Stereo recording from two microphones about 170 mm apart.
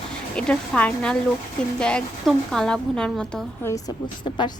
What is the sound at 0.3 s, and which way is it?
A woman's voice, 5° left (ahead or behind).